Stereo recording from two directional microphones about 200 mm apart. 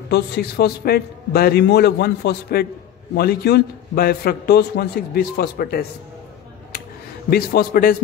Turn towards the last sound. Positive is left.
turn(degrees=45)  # may be behind; listen again after turning